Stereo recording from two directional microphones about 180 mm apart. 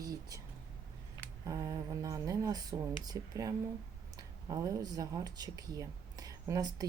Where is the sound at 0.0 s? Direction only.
20° right (ahead or behind).